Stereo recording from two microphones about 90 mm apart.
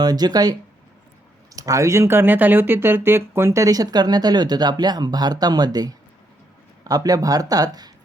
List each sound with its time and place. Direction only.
0.0 s speech: 50° right (ahead or behind)
1.5 s speech: 40° right (ahead or behind)